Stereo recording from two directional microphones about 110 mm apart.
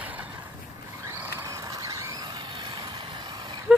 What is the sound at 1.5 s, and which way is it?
Vehicle, 30° right (ahead or behind).